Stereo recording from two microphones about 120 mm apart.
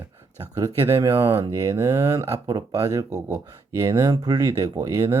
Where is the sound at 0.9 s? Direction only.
25° right (ahead or behind).